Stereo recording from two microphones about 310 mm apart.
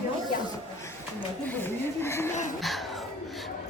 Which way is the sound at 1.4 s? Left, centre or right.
Centre.